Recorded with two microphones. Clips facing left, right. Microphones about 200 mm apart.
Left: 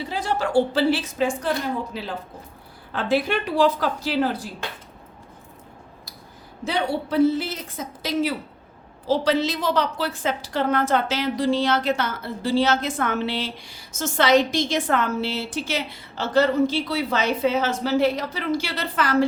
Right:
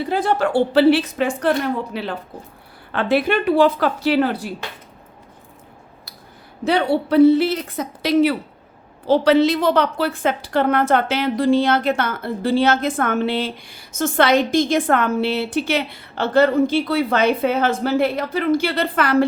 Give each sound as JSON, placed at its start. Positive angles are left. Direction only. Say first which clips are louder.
{"t": 0.0, "sound": "a woman's voice", "louder": "right 6 dB", "side_deg": -55}
{"t": 6.7, "sound": "a woman's voice", "louder": "right 7 dB", "side_deg": -65}